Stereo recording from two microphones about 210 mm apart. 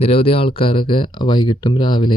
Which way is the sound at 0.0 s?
25° left (ahead or behind).